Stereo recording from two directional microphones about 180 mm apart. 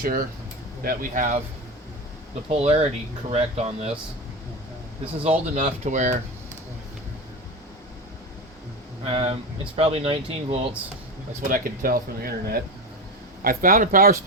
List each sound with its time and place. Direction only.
0.0 s speech: 55° right (ahead or behind)
2.5 s speech: 35° right (ahead or behind)
5.5 s speech: 40° right (ahead or behind)
9.0 s speech: 35° right (ahead or behind)
11.4 s speech: 50° right (ahead or behind)